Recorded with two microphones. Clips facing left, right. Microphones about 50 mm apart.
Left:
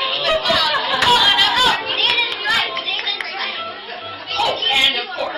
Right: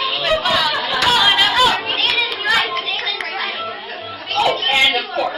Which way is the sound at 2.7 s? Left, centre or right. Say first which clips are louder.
Right 1 dB; centre.